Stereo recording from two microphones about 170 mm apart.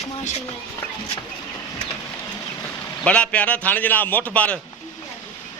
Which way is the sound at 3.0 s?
5° left (ahead or behind).